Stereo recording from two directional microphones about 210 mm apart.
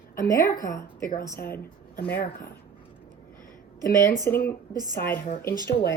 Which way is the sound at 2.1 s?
40° left (ahead or behind).